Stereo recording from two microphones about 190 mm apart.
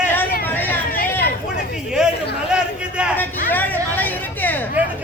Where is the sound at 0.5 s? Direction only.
10° left (ahead or behind).